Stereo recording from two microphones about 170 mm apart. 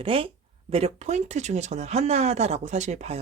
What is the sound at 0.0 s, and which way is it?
Speech, 35° right (ahead or behind).